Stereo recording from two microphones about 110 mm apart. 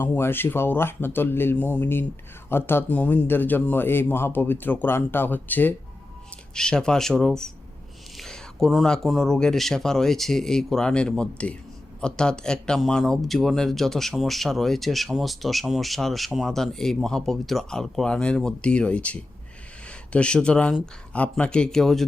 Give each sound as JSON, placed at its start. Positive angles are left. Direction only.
{"t": 0.0, "sound": "a man's voice", "side_deg": 20}
{"t": 6.5, "sound": "a man's voice", "side_deg": 5}